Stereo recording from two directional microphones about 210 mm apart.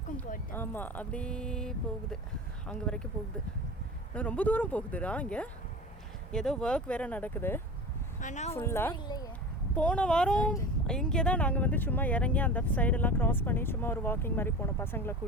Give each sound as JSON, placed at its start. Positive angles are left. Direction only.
{"t": 0.5, "sound": "speech", "side_deg": 10}
{"t": 4.1, "sound": "speech", "side_deg": 5}
{"t": 8.2, "sound": "speech", "side_deg": 35}
{"t": 8.5, "sound": "speech", "side_deg": 10}
{"t": 9.7, "sound": "speech", "side_deg": 5}